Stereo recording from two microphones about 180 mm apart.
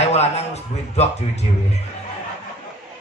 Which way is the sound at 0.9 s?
35° left (ahead or behind).